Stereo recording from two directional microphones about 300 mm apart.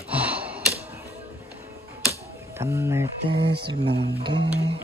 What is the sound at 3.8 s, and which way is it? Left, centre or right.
Speech, right.